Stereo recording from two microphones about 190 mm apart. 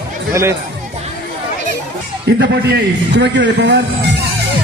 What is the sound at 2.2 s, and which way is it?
A man's voice, 60° right (ahead or behind).